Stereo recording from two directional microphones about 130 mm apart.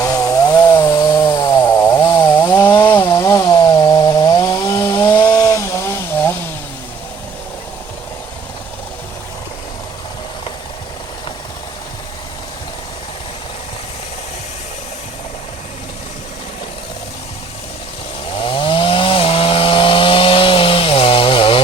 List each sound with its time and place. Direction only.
0.0 s chainsaw: 25° left (ahead or behind)
2.0 s chainsaw: 35° left (ahead or behind)
2.6 s chainsaw: 15° left (ahead or behind)
18.4 s chainsaw: 40° left (ahead or behind)